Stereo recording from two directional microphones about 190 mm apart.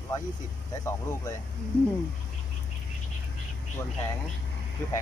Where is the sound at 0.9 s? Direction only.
15° left (ahead or behind).